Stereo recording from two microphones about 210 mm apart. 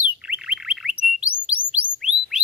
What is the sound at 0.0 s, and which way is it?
Bird, 5° right (ahead or behind).